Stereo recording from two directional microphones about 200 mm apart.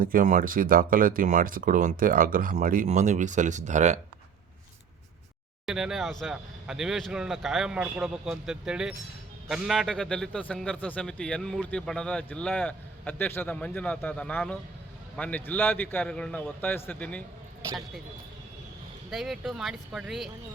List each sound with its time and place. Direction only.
0.0 s speech: 45° right (ahead or behind)
5.6 s a man's voice: 5° right (ahead or behind)
19.1 s a man's voice: centre (ahead or behind)